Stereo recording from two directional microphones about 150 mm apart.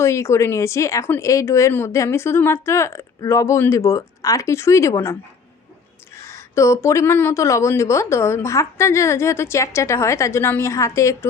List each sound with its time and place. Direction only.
0.0 s speech: 20° left (ahead or behind)
6.1 s speech: 20° left (ahead or behind)